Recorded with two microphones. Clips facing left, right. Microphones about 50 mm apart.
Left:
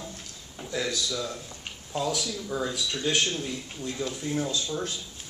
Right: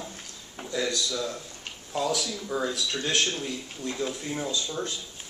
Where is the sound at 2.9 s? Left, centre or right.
Centre.